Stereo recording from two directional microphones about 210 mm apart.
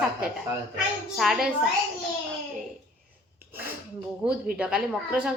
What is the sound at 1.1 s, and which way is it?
Speech, centre (ahead or behind).